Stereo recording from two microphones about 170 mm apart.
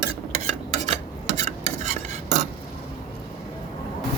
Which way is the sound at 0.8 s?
40° right (ahead or behind).